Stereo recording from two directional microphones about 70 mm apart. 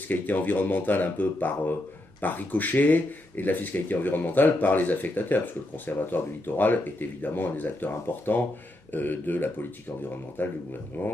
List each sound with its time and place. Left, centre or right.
0.1 s speech: left